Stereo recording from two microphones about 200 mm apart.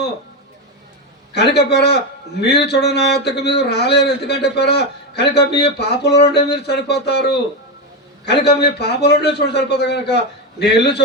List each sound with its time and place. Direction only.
1.3 s speech: 55° left (ahead or behind)